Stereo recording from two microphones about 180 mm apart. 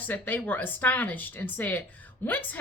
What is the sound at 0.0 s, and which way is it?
A woman's voice, 10° left (ahead or behind).